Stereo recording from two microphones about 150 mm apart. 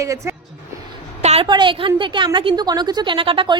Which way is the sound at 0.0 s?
20° right (ahead or behind).